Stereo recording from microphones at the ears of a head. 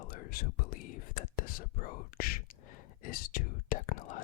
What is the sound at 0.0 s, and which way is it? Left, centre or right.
Whispering, left.